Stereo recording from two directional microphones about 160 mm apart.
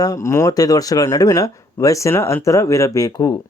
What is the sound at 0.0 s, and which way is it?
Speech, 20° left (ahead or behind).